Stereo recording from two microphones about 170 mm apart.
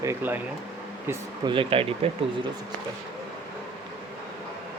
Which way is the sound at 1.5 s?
30° right (ahead or behind).